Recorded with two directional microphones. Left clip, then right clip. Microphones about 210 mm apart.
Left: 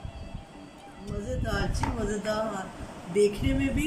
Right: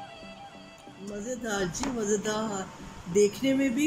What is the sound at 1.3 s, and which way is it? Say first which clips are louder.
Speech: right 1 dB; 5° left (ahead or behind).